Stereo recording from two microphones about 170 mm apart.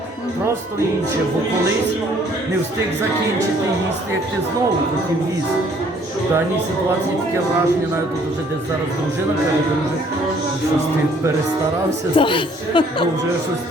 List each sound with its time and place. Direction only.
12.1 s speech: 30° left (ahead or behind)